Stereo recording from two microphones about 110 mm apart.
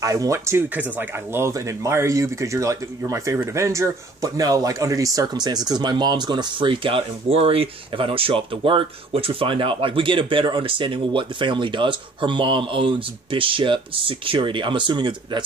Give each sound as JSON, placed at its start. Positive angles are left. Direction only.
{"t": 0.0, "sound": "speech", "side_deg": -30}
{"t": 0.7, "sound": "speech", "side_deg": -15}